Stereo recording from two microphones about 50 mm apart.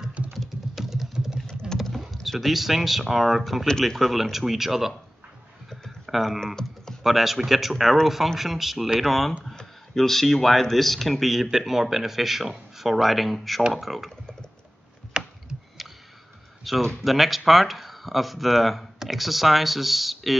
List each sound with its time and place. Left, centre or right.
0.3 s typing: centre
1.1 s vehicle: centre
2.2 s speech: centre
5.7 s clicking: centre
6.4 s typing: centre
7.0 s speech: centre
15.2 s a sound: centre
15.8 s a sound: centre
16.6 s speech: centre